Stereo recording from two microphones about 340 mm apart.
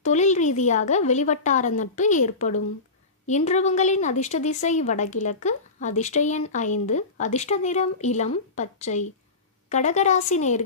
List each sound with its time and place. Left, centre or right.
0.0 s a woman's voice: left